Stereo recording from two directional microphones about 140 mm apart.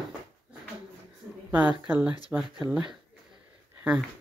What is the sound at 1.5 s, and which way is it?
Speech, 10° right (ahead or behind).